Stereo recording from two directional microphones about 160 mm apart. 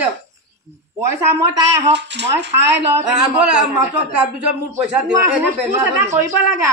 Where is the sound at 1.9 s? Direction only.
90° right.